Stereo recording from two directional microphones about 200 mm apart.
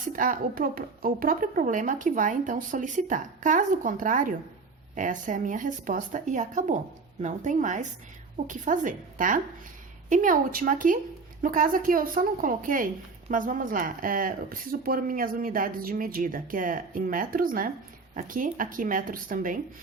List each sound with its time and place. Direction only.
0.1 s a woman's voice: 40° right (ahead or behind)